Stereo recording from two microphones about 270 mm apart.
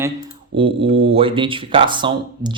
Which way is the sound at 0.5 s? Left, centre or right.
Centre.